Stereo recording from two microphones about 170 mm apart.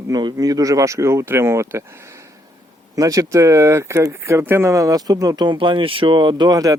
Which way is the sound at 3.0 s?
20° right (ahead or behind).